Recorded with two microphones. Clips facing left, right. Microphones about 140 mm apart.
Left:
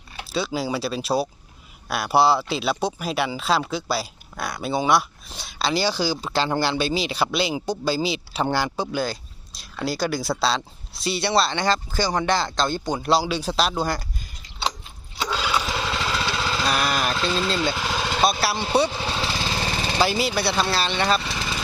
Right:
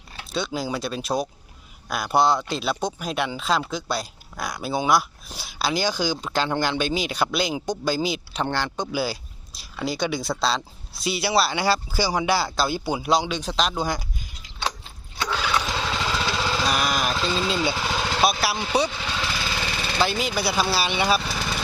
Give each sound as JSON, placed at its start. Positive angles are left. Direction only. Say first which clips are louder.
{"t": 0.3, "sound": "speech", "louder": "left 2 dB", "side_deg": 0}
{"t": 8.9, "sound": "speech", "louder": "even", "side_deg": -5}
{"t": 15.3, "sound": "lawn mower", "louder": "even", "side_deg": 10}
{"t": 18.9, "sound": "lawn mower", "louder": "left 2 dB", "side_deg": 25}
{"t": 20.0, "sound": "speech", "louder": "left 2 dB", "side_deg": 5}